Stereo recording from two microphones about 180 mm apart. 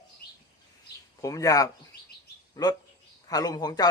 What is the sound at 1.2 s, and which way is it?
Speech, 20° left (ahead or behind).